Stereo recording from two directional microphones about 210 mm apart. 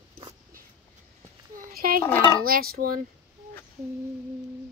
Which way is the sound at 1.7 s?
45° right (ahead or behind).